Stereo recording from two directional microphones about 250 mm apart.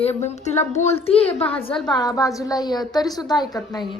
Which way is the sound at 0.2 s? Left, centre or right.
Left.